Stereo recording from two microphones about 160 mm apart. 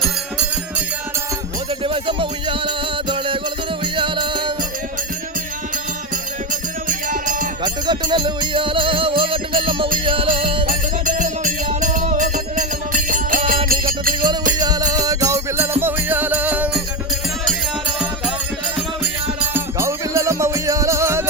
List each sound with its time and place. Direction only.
1.8 s music: 35° right (ahead or behind)
6.5 s music: 55° right (ahead or behind)
7.6 s music: 30° right (ahead or behind)
10.7 s music: 55° right (ahead or behind)
14.6 s music: 25° right (ahead or behind)
19.4 s music: 15° right (ahead or behind)